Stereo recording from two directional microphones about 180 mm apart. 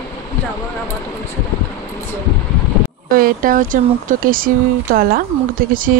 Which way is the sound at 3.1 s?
50° right (ahead or behind).